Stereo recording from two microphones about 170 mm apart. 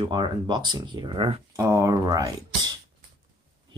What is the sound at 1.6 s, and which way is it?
Speech, 20° right (ahead or behind).